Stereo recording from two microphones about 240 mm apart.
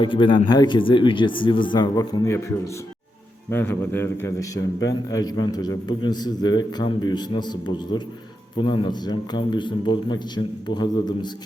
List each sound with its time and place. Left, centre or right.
0.0 s a man's voice: centre
3.5 s a man's voice: centre